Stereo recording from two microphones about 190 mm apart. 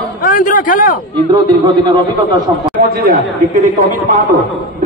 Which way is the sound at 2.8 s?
55° right (ahead or behind).